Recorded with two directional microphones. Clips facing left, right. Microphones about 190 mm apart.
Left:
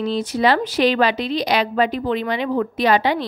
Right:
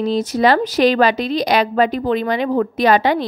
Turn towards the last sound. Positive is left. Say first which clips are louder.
# right 3 dB
turn(degrees=-45)  # may be behind; listen again after turning